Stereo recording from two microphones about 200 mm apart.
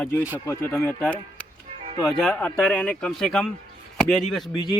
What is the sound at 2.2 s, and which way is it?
Speech, 5° left (ahead or behind).